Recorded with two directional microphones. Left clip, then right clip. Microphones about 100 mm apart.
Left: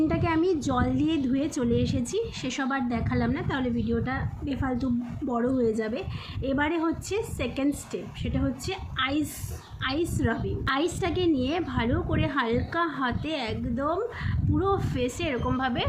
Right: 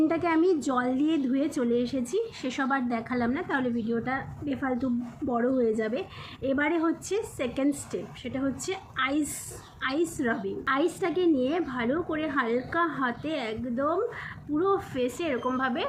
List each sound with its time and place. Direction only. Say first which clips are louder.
0.0 s a woman's voice: right 1 dB; centre (ahead or behind)
4.4 s a woman's voice: even; 25° left (ahead or behind)